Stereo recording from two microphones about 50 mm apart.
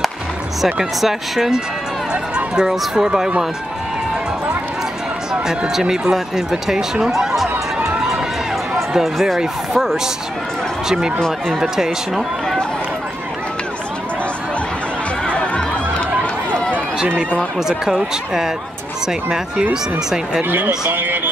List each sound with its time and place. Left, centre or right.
1.0 s speech: centre
5.3 s speech: centre
8.7 s speech: centre
11.1 s speech: centre
11.7 s speech: centre
15.2 s music: left
16.5 s run: left
17.6 s speech: centre
19.7 s speech: centre
20.9 s speech: right